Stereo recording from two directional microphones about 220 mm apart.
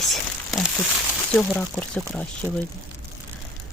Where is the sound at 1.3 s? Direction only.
5° left (ahead or behind).